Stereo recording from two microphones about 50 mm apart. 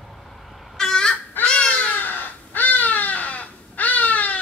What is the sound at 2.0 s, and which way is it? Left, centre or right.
Crow, left.